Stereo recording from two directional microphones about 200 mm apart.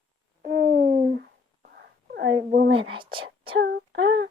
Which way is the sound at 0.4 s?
40° right (ahead or behind).